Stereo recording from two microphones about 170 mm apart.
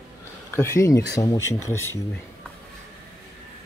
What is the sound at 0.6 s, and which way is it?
Speech, 15° left (ahead or behind).